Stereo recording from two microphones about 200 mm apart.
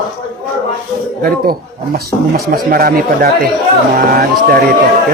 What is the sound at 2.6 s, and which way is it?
Speech, 50° right (ahead or behind).